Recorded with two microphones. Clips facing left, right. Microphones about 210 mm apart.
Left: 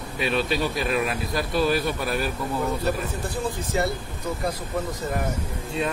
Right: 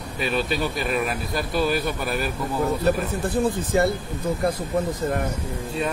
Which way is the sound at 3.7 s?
55° right (ahead or behind).